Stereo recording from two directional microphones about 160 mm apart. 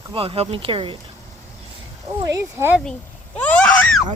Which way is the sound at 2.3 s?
15° right (ahead or behind).